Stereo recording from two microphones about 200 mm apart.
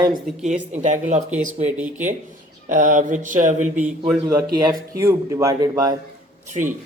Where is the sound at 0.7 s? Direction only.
35° right (ahead or behind).